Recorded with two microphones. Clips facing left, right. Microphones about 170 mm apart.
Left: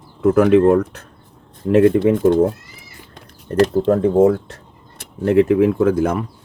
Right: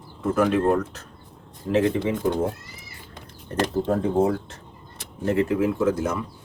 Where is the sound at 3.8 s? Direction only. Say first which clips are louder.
Left 7 dB; 75° left (ahead or behind); by 6.2 s 60° left (ahead or behind).